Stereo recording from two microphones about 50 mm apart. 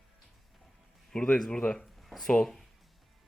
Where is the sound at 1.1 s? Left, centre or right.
Centre.